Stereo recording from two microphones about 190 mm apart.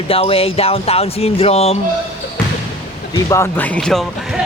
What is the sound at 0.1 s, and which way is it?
Speech, 30° left (ahead or behind).